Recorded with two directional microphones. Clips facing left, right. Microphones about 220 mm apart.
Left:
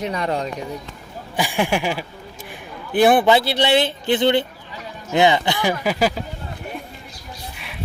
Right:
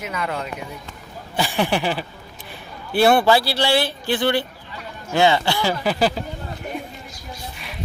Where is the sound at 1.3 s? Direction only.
10° left (ahead or behind).